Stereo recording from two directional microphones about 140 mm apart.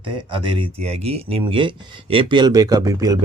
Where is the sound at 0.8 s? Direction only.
50° right (ahead or behind); by 3.2 s 25° right (ahead or behind).